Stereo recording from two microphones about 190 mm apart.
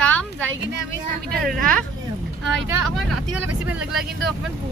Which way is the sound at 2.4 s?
Centre (ahead or behind).